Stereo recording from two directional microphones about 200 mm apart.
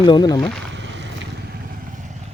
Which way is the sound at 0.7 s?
60° right (ahead or behind).